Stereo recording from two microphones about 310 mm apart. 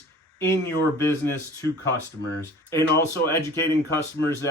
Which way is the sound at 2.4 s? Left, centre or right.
Centre.